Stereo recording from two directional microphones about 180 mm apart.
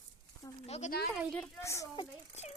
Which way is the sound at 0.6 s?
40° left (ahead or behind).